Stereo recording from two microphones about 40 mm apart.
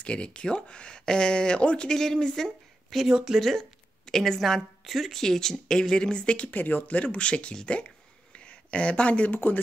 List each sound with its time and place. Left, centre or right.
0.0 s speech: left
2.0 s a woman's voice: centre
3.1 s speech: centre
3.3 s a woman's voice: centre; by 6.5 s left
6.5 s speech: left
9.3 s speech: left